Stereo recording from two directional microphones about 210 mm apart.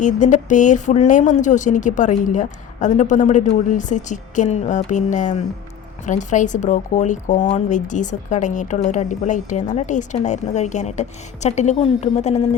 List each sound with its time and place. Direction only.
0.0 s speech: 35° left (ahead or behind)